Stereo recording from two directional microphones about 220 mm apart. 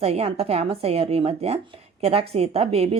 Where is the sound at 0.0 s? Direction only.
30° right (ahead or behind).